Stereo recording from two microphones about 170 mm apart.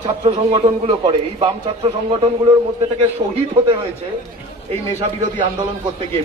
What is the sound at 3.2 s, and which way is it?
Speech, 35° right (ahead or behind).